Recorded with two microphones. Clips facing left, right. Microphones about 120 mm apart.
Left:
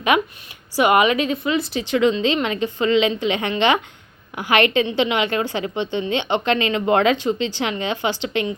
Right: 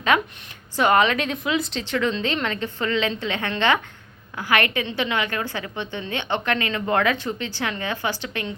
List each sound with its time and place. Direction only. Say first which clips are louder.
0.1 s a woman's voice: left 2 dB; 15° left (ahead or behind)
1.8 s a woman's voice: left 6 dB; 15° left (ahead or behind)